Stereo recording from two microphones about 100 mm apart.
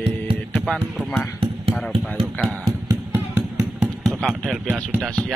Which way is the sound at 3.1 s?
15° right (ahead or behind).